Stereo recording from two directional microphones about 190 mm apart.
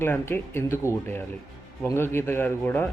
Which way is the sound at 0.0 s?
10° left (ahead or behind).